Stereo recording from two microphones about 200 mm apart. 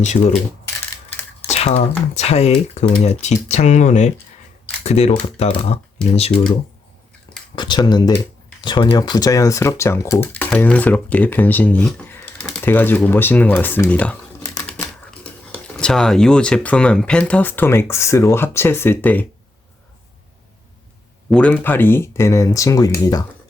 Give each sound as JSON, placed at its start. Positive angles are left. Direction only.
{"t": 0.1, "sound": "speech", "side_deg": 40}
{"t": 1.5, "sound": "computer keyboard", "side_deg": 35}
{"t": 2.1, "sound": "speech", "side_deg": 30}
{"t": 7.5, "sound": "speech", "side_deg": 20}
{"t": 21.2, "sound": "speech", "side_deg": 5}